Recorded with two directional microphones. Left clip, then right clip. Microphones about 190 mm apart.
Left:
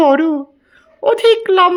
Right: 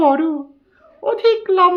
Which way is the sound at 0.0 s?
30° left (ahead or behind).